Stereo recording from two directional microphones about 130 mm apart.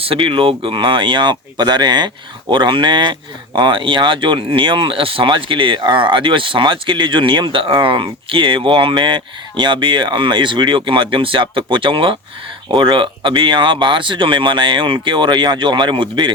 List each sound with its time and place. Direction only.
0.0 s speech: 45° right (ahead or behind)